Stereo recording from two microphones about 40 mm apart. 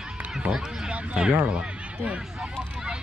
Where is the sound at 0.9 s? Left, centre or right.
Right.